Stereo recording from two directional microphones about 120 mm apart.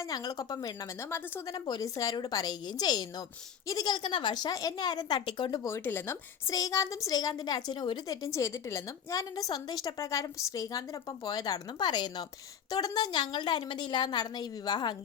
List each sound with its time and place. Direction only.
0.1 s a woman's voice: 30° left (ahead or behind)
5.6 s a woman's voice: 20° left (ahead or behind)
6.5 s a woman's voice: 30° left (ahead or behind)